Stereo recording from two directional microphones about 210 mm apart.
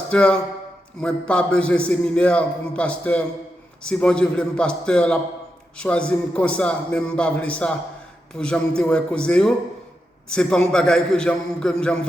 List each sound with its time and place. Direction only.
0.1 s a man's voice: 5° left (ahead or behind)